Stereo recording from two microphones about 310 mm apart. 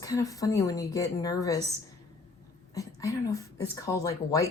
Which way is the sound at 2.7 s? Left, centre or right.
Centre.